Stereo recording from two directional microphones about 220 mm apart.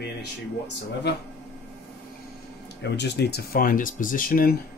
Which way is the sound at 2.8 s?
50° left (ahead or behind).